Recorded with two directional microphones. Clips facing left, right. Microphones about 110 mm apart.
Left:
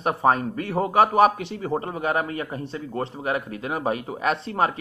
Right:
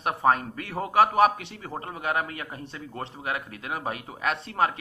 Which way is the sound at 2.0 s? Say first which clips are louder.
Left 2 dB; 5° left (ahead or behind).